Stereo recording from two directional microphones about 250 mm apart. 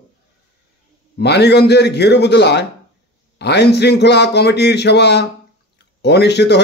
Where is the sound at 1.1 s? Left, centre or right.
Left.